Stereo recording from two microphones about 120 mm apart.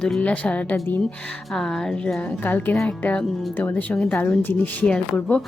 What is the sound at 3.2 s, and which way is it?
Speech, centre (ahead or behind).